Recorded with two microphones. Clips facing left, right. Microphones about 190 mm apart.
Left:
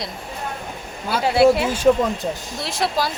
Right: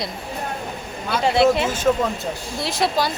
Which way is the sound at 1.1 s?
10° left (ahead or behind).